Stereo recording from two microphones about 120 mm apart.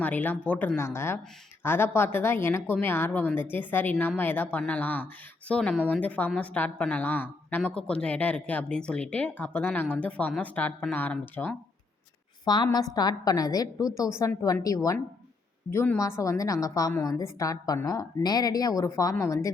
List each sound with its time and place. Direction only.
0.0 s a woman's voice: 15° left (ahead or behind)
12.7 s a woman's voice: 35° left (ahead or behind)